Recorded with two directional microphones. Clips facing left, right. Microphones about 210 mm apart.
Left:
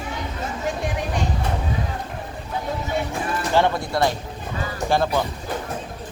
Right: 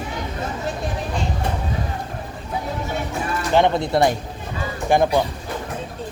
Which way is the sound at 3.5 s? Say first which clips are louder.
Right 4 dB; 20° right (ahead or behind).